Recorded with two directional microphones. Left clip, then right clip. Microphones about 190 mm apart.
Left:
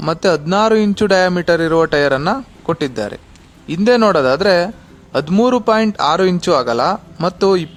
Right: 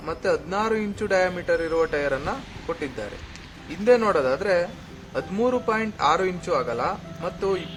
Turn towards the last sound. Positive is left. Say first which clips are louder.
# left 12 dB
turn(degrees=55)  # may be behind; listen again after turning